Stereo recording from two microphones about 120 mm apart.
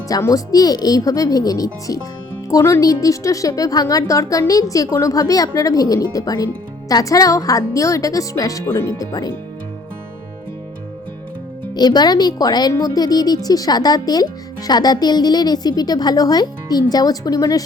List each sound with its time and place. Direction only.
0.1 s a woman's voice: 30° left (ahead or behind)
11.7 s a woman's voice: 35° left (ahead or behind)